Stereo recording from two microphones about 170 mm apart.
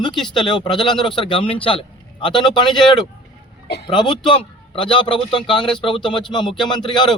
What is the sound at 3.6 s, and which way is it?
Speech, 75° left (ahead or behind).